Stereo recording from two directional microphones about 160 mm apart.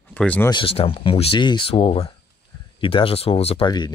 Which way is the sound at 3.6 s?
25° left (ahead or behind).